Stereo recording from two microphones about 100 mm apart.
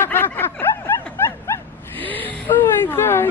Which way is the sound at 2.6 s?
30° left (ahead or behind).